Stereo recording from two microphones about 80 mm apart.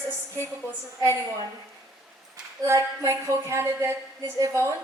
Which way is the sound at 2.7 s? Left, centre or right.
Right.